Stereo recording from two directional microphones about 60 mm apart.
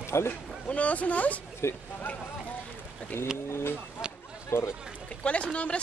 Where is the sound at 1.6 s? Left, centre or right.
Left.